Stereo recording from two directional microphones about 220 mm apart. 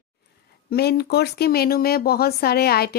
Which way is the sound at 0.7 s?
45° left (ahead or behind).